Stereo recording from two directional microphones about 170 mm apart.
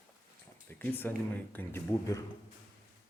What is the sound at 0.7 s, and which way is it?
Speech, 10° left (ahead or behind).